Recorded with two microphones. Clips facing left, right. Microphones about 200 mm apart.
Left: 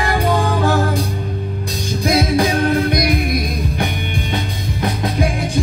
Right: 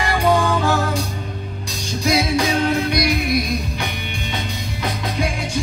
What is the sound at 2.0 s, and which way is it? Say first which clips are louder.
Music: left 3 dB; 55° left (ahead or behind).